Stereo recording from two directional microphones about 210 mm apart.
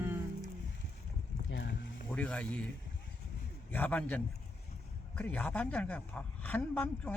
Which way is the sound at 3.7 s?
10° left (ahead or behind).